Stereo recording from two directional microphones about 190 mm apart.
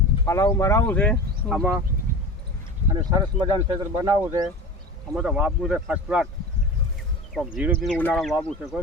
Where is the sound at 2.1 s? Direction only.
45° right (ahead or behind).